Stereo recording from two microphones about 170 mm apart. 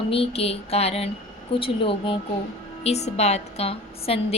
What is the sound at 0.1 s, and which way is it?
A woman's voice, 35° left (ahead or behind).